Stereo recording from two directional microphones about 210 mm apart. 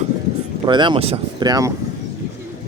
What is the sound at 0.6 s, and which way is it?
Speech, 20° right (ahead or behind).